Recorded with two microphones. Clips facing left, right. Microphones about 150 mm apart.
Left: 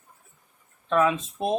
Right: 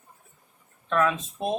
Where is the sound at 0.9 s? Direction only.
15° left (ahead or behind).